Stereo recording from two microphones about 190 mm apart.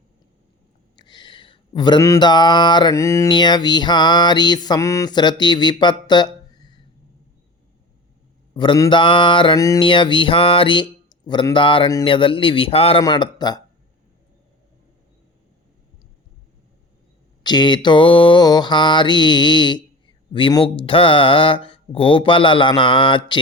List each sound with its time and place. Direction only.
0.9 s a sound: 25° left (ahead or behind)
8.5 s mantra: 25° left (ahead or behind)
17.4 s mantra: 25° left (ahead or behind)